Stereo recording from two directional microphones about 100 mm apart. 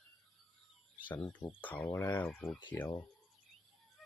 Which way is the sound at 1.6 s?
15° left (ahead or behind).